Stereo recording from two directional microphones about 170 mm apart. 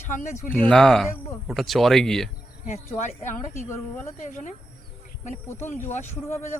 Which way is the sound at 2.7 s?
45° left (ahead or behind).